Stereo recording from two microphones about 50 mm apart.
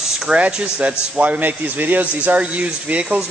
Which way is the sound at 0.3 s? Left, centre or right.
Centre.